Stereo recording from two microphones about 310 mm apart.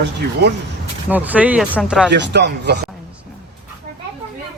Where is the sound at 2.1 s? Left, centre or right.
Right.